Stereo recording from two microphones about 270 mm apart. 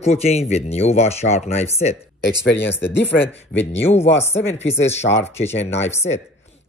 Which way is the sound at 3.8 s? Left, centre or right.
Left.